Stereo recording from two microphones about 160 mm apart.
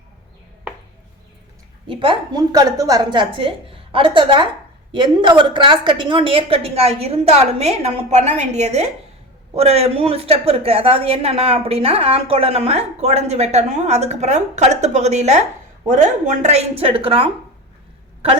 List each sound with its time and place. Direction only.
1.9 s a woman's voice: 30° right (ahead or behind)